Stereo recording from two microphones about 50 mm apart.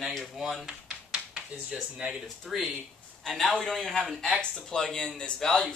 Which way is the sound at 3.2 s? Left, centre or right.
Centre.